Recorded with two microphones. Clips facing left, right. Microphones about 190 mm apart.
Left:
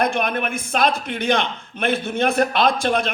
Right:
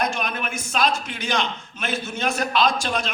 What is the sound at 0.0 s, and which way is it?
A man's voice, 55° left (ahead or behind).